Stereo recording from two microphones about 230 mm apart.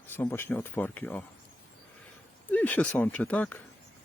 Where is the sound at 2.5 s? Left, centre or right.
Centre.